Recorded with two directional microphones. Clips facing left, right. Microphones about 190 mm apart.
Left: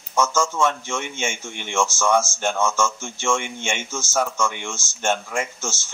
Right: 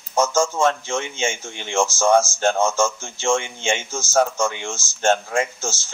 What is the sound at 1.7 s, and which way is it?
Speech, 35° right (ahead or behind).